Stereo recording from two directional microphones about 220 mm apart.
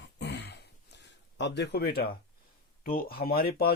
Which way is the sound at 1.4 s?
50° left (ahead or behind).